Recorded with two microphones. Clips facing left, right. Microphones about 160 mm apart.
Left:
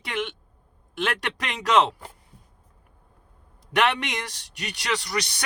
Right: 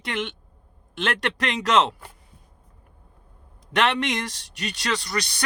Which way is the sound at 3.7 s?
10° left (ahead or behind).